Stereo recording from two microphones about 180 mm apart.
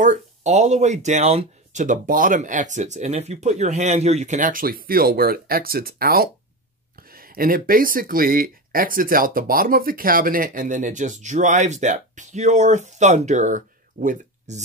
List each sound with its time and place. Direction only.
0.0 s speech: 40° right (ahead or behind)